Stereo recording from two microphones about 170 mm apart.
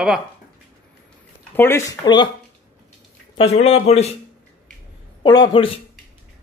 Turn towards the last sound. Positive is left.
turn(degrees=30)  # may be behind; listen again after turning